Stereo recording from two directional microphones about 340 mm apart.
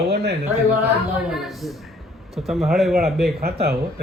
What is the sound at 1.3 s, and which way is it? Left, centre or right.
A man's voice, centre.